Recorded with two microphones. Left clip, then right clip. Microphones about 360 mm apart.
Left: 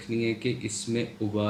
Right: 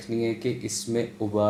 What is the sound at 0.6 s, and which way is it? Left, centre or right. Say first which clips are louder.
Speech: right 3 dB; centre.